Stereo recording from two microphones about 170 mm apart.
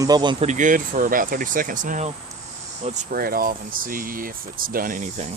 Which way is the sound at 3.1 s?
60° right (ahead or behind).